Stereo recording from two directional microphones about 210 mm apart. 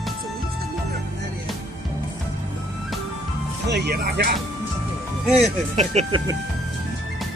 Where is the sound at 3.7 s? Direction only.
50° right (ahead or behind).